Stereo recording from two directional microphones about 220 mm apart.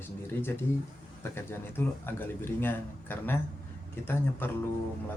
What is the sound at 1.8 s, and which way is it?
Speech, 10° left (ahead or behind).